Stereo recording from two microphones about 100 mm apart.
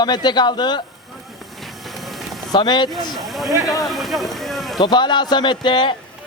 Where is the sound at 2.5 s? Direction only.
45° left (ahead or behind).